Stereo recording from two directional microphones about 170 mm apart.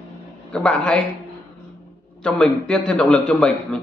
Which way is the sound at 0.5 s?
5° left (ahead or behind).